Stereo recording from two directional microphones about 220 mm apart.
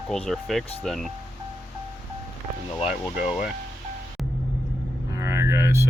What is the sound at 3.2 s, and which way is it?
Speech, 35° left (ahead or behind).